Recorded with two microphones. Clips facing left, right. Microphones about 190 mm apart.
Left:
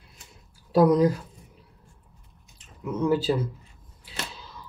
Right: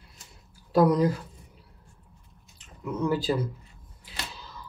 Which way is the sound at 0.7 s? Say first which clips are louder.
Left 2 dB; 10° left (ahead or behind).